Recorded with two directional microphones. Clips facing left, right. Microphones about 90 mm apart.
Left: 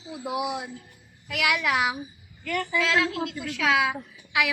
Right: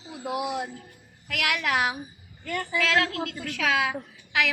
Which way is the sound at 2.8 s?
50° right (ahead or behind).